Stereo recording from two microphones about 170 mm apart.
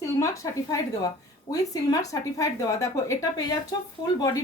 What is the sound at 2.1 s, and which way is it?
A woman's voice, 20° left (ahead or behind).